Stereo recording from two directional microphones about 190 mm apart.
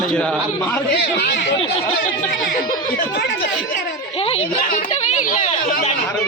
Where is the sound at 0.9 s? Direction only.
60° left (ahead or behind).